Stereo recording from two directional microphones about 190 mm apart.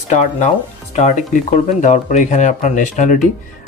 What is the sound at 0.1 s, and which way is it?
Speech, 40° left (ahead or behind).